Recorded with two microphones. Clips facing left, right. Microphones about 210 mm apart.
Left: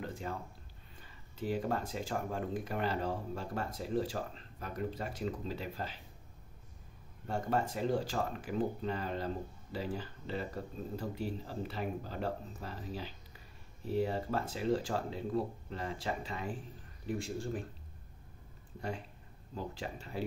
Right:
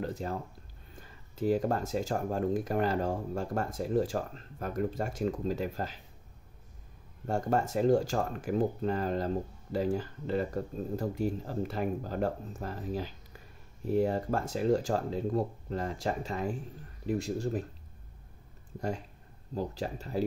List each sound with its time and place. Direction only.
0.0 s a sound: 40° right (ahead or behind)
0.9 s speech: 45° right (ahead or behind)
7.2 s speech: 45° right (ahead or behind)
19.5 s speech: 40° right (ahead or behind)